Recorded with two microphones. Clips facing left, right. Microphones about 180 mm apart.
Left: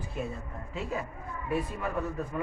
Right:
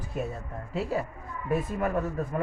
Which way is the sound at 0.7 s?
35° right (ahead or behind).